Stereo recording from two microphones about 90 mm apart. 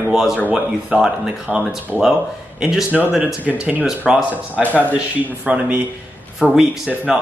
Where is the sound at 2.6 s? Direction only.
10° right (ahead or behind).